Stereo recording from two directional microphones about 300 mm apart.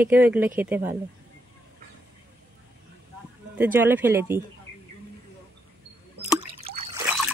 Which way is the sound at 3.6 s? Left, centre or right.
Centre.